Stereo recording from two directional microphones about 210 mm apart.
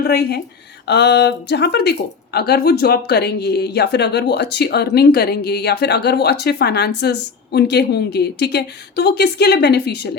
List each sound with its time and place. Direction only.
0.0 s speech: 50° left (ahead or behind)